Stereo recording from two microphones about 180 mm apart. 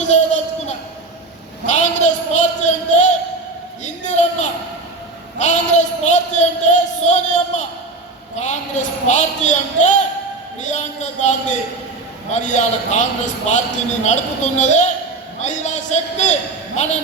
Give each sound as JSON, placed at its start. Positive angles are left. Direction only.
{"t": 0.1, "sound": "child singing", "side_deg": 35}
{"t": 1.8, "sound": "a sound", "side_deg": 40}
{"t": 8.4, "sound": "a woman's voice", "side_deg": 40}